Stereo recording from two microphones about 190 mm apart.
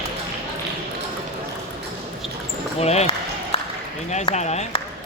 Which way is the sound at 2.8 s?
35° left (ahead or behind).